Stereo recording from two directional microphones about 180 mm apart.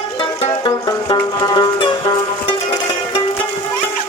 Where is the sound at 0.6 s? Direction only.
25° left (ahead or behind).